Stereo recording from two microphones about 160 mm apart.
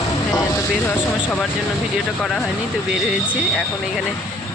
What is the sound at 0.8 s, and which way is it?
Speech, 15° left (ahead or behind).